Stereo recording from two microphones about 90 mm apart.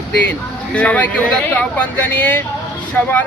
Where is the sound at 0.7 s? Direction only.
15° left (ahead or behind).